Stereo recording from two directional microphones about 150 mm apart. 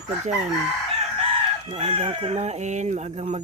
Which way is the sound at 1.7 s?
40° right (ahead or behind).